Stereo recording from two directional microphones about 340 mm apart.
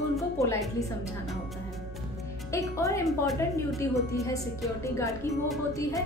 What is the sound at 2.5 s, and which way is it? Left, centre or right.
Speech, centre.